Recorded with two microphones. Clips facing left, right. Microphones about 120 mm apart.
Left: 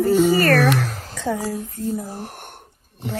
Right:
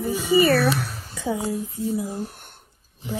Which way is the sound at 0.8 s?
90° left.